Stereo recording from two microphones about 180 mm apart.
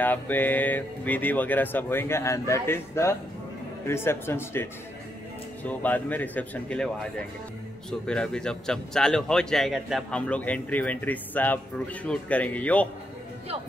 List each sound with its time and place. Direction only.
0.0 s speech: 10° left (ahead or behind)
8.1 s speech: 5° left (ahead or behind)